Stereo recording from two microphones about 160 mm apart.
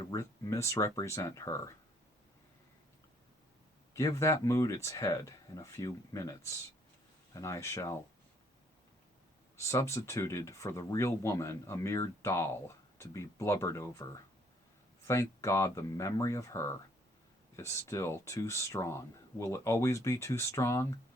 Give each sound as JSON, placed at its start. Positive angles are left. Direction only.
{"t": 0.0, "sound": "speech", "side_deg": 20}
{"t": 3.9, "sound": "speech", "side_deg": 20}
{"t": 9.6, "sound": "speech", "side_deg": 15}